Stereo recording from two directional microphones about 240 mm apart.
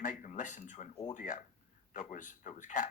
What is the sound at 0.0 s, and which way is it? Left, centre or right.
Speech, left.